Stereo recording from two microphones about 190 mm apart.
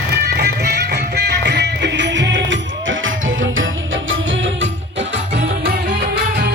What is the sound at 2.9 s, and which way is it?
Music, 90° right.